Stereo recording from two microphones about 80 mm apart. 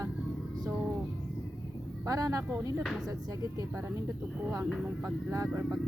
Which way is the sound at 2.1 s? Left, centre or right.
Right.